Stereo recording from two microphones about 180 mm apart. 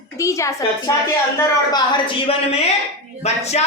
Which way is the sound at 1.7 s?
30° left (ahead or behind).